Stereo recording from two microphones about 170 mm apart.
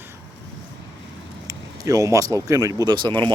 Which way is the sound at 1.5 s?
20° right (ahead or behind).